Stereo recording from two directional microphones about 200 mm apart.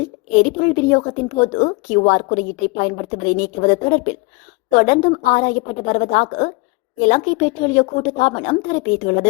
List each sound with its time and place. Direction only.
0.3 s a woman's voice: 35° left (ahead or behind)